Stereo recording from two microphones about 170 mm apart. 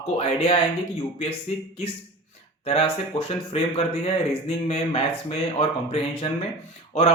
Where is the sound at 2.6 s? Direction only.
35° left (ahead or behind).